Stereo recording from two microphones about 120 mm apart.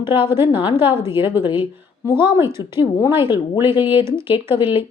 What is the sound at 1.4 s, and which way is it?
Speech, 45° left (ahead or behind).